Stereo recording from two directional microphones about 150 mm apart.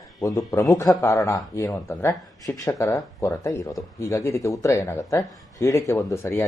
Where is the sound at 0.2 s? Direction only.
20° left (ahead or behind).